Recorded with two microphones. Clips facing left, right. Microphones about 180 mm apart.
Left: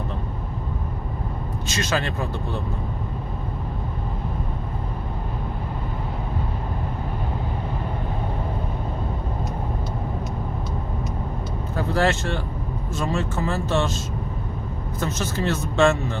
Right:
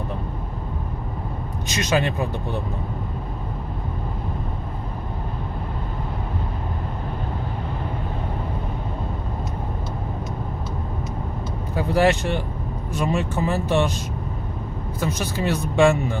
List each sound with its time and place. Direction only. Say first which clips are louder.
1.7 s speech: right 4 dB; 20° right (ahead or behind)
11.7 s speech: right 3 dB; 15° right (ahead or behind)
15.0 s speech: right 1 dB; 10° right (ahead or behind)